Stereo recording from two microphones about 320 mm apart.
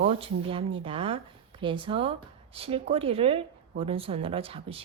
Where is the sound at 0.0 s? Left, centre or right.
Centre.